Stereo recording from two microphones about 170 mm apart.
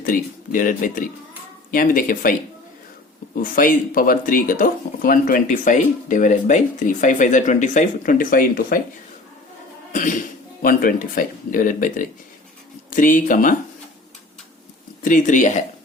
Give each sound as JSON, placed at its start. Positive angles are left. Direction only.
{"t": 0.0, "sound": "speech", "side_deg": 55}
{"t": 3.4, "sound": "speech", "side_deg": 55}
{"t": 9.9, "sound": "speech", "side_deg": 50}
{"t": 15.0, "sound": "speech", "side_deg": 50}